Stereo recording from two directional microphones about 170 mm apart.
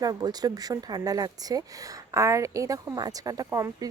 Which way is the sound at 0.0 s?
25° right (ahead or behind).